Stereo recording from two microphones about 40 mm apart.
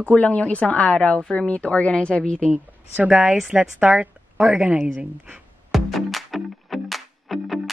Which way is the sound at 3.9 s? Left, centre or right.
Right.